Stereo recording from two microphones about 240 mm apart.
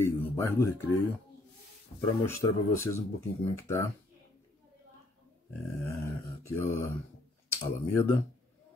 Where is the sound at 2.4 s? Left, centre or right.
Centre.